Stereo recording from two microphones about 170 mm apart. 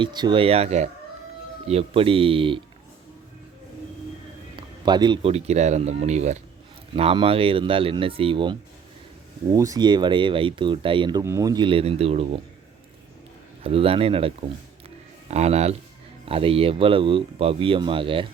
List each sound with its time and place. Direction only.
0.0 s speech: 25° right (ahead or behind)
4.5 s speech: 25° right (ahead or behind)
9.5 s speech: 20° right (ahead or behind)
11.2 s speech: 20° right (ahead or behind); by 12.4 s 35° right (ahead or behind)
13.7 s speech: 35° right (ahead or behind)
14.8 s a sound: 40° right (ahead or behind)
16.2 s speech: 35° right (ahead or behind)